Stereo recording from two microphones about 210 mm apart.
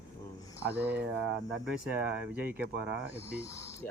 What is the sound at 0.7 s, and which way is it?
Speech, 10° right (ahead or behind).